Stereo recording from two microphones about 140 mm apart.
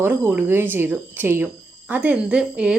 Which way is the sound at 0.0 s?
15° right (ahead or behind).